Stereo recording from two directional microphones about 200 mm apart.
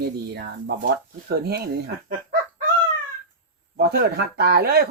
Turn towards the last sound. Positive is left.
turn(degrees=-50)  # may be behind; listen again after turning